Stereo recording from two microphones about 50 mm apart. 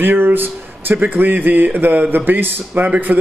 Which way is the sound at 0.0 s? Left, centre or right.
Right.